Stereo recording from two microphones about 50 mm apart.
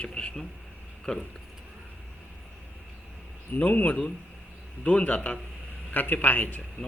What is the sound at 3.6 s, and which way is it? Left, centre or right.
A man's voice, left.